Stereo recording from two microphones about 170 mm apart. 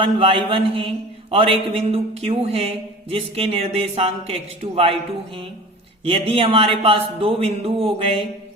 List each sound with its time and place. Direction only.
0.0 s a man's voice: 30° right (ahead or behind)